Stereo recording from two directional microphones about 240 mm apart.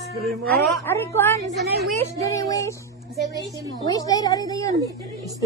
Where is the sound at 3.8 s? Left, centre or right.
Centre.